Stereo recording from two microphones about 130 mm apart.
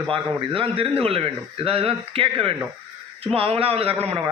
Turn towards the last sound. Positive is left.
turn(degrees=-50)  # may be behind; listen again after turning